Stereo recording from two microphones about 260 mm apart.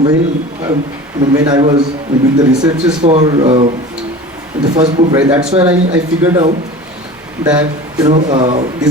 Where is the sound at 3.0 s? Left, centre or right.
Right.